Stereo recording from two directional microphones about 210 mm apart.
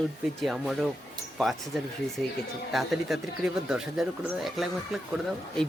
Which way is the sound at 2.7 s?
Centre (ahead or behind).